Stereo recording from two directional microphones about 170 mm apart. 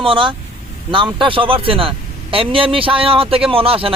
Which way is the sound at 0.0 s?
30° right (ahead or behind).